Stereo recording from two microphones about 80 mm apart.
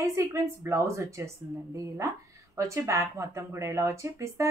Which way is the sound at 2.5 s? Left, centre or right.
Right.